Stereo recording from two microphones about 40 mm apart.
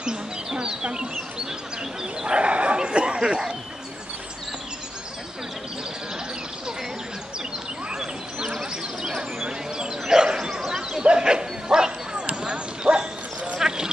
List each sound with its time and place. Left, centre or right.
0.0 s bird: centre
2.2 s bow-wow: right
3.3 s speech: centre
7.9 s a sound: centre
11.1 s bow-wow: right
13.6 s clip-clop: centre